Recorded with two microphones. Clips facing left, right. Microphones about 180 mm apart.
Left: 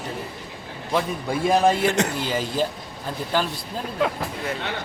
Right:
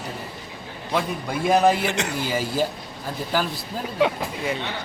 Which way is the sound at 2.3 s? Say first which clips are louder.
Even; 10° right (ahead or behind).